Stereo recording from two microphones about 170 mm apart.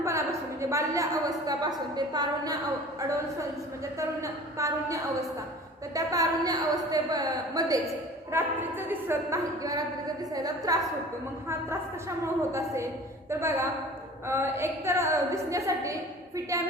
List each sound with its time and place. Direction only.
0.0 s a woman's voice: 15° right (ahead or behind)
3.9 s a woman's voice: 20° right (ahead or behind)